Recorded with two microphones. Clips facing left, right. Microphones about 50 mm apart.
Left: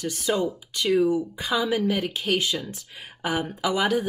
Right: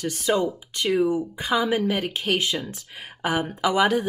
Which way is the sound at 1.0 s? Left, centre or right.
Right.